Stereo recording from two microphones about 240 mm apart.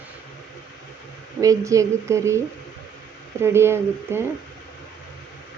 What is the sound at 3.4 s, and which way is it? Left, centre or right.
Speech, centre.